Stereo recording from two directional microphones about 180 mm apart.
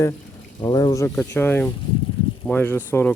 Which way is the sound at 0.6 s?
20° left (ahead or behind).